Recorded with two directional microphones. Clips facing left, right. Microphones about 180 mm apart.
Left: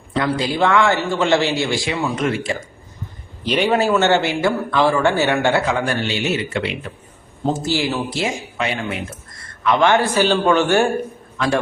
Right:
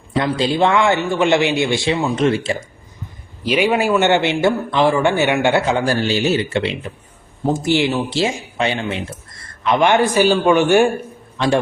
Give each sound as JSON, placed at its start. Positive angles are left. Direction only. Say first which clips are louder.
{"t": 0.2, "sound": "a man's voice", "louder": "right 2 dB", "side_deg": -25}
{"t": 3.4, "sound": "a man's voice", "louder": "right 1 dB", "side_deg": -10}
{"t": 5.7, "sound": "a man's voice", "louder": "right 4 dB", "side_deg": -30}
{"t": 7.4, "sound": "a man's voice", "louder": "right 3 dB", "side_deg": -15}
{"t": 8.1, "sound": "a man's voice", "louder": "right 3 dB", "side_deg": -30}
{"t": 11.3, "sound": "a man's voice", "louder": "right 3 dB", "side_deg": -30}